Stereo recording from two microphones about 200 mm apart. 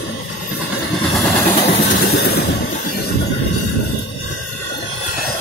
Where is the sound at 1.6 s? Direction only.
30° left (ahead or behind).